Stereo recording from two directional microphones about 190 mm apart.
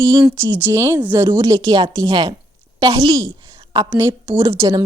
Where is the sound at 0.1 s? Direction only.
15° right (ahead or behind).